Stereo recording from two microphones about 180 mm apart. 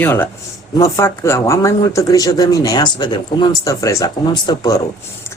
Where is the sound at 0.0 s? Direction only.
10° left (ahead or behind).